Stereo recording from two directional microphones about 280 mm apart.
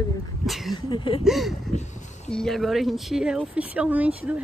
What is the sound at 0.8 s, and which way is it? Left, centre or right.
Speech, centre.